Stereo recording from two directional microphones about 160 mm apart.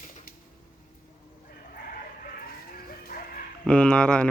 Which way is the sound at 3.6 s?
5° left (ahead or behind).